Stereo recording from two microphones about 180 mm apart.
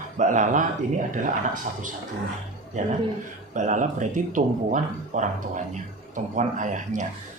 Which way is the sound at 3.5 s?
45° right (ahead or behind).